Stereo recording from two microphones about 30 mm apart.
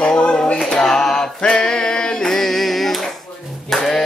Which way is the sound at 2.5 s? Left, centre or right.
Centre.